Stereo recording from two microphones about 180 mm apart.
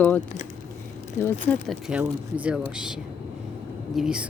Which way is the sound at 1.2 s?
10° left (ahead or behind).